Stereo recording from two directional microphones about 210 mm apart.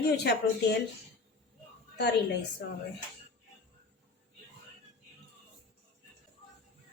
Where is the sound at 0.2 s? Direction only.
50° left (ahead or behind).